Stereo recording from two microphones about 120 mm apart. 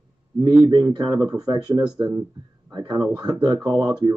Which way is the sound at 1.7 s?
20° right (ahead or behind).